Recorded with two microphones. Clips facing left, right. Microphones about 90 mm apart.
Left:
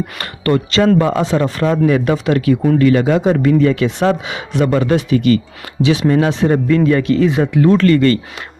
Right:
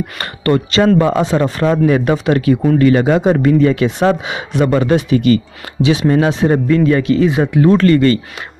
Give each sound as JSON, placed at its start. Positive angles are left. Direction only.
{"t": 0.2, "sound": "speech", "side_deg": -25}
{"t": 1.9, "sound": "speech", "side_deg": -35}
{"t": 3.8, "sound": "speech", "side_deg": -20}
{"t": 6.9, "sound": "speech", "side_deg": -5}
{"t": 7.7, "sound": "speech", "side_deg": -20}